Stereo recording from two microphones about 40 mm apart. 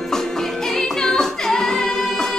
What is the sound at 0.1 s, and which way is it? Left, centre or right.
Music, centre.